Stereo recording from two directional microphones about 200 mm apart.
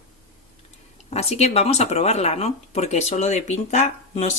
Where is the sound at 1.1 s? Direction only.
30° left (ahead or behind).